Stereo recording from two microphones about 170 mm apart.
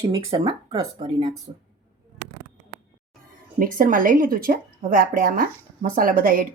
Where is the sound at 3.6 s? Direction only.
50° right (ahead or behind).